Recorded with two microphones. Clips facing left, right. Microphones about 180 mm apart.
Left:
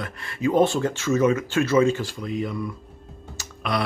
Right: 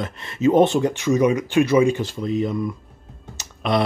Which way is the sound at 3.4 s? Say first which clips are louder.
Right 5 dB; 25° right (ahead or behind).